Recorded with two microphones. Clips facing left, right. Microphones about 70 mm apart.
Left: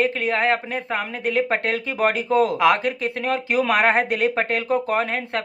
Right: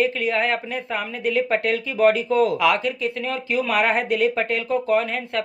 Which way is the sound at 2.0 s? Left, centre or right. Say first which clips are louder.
Right 2 dB; centre.